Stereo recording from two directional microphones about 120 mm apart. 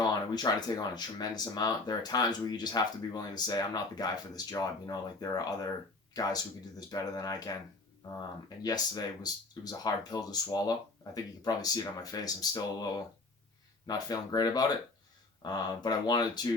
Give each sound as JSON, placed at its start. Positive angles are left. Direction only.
{"t": 0.0, "sound": "speech", "side_deg": 35}
{"t": 8.6, "sound": "speech", "side_deg": 35}